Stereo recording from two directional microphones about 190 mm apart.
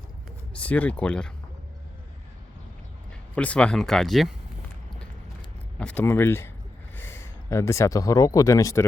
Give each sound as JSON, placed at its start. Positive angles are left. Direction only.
{"t": 0.5, "sound": "speech", "side_deg": 5}
{"t": 3.1, "sound": "speech", "side_deg": 5}
{"t": 5.8, "sound": "speech", "side_deg": 10}